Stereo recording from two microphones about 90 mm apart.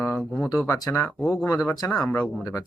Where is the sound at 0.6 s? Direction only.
35° left (ahead or behind).